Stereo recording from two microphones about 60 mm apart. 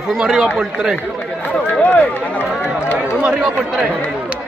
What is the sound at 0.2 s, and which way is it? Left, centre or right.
Speech, centre.